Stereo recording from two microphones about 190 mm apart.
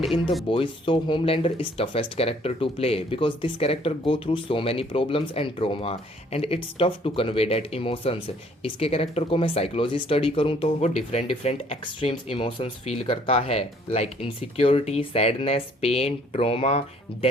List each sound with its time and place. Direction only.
0.4 s speech: 25° left (ahead or behind)